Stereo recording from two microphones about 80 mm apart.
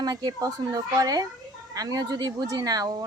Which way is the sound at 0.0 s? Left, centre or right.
Right.